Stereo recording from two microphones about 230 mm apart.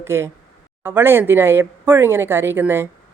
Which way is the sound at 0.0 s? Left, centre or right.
Centre.